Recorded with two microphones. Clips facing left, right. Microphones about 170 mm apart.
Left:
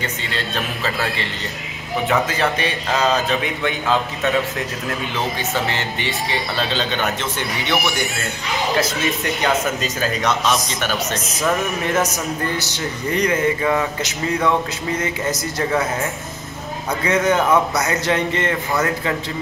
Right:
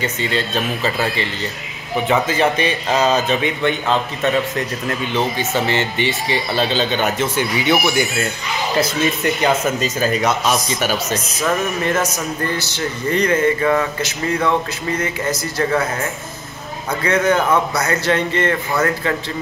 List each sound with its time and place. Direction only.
0.0 s speech: centre (ahead or behind)
5.4 s speech: centre (ahead or behind)
11.8 s a man's voice: 15° left (ahead or behind)
14.9 s speech: 20° left (ahead or behind)
17.0 s a man's voice: 20° left (ahead or behind)